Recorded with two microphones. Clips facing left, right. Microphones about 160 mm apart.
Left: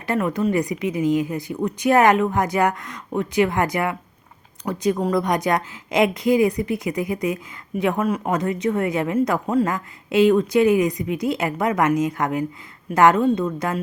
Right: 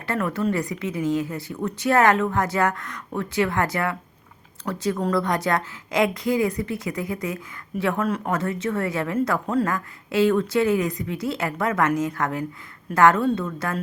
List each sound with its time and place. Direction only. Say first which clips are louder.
0.0 s a woman's voice: left 3 dB; 20° left (ahead or behind)